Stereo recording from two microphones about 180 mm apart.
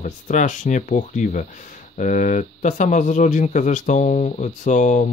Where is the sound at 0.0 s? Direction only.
45° left (ahead or behind).